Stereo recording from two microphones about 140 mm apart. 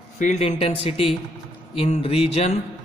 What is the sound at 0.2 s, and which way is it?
A man's voice, 55° left (ahead or behind).